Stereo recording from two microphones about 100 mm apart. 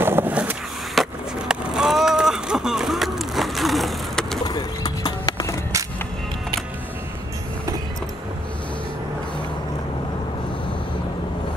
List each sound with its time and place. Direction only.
0.0 s skateboard: 20° right (ahead or behind)
1.0 s skateboard: centre (ahead or behind)
1.5 s run: 5° right (ahead or behind)
4.5 s clip-clop: 45° left (ahead or behind)